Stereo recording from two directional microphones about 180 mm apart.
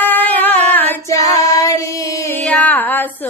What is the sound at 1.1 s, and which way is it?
Child singing, 20° left (ahead or behind).